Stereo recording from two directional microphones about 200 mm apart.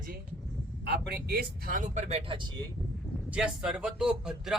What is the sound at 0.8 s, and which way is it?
A man's voice, 55° right (ahead or behind).